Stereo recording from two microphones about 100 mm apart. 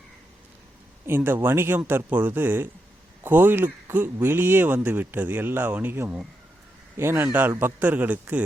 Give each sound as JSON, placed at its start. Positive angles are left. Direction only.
{"t": 1.0, "sound": "speech", "side_deg": -20}